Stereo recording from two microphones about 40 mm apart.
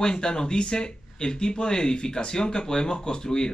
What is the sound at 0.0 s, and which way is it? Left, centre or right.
Speech, centre.